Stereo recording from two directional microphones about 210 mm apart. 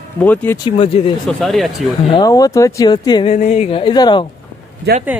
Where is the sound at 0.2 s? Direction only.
10° left (ahead or behind).